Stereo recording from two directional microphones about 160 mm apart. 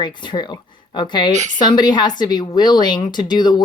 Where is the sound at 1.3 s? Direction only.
45° right (ahead or behind).